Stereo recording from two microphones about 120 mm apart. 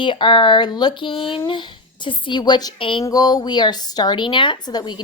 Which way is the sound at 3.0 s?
30° left (ahead or behind).